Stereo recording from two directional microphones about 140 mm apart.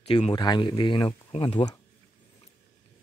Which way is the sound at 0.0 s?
50° left (ahead or behind).